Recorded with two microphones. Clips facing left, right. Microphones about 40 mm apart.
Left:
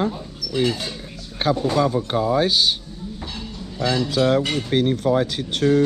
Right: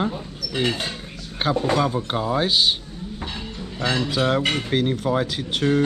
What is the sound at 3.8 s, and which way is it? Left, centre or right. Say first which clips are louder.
Speech: left 2 dB; right.